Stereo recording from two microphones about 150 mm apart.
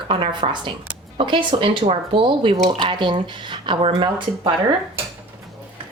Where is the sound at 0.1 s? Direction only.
35° right (ahead or behind).